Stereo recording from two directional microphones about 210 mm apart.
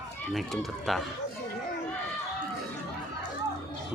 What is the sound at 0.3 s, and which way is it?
Speech, centre (ahead or behind).